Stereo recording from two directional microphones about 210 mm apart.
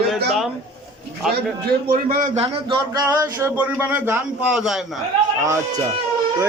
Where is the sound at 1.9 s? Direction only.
40° right (ahead or behind).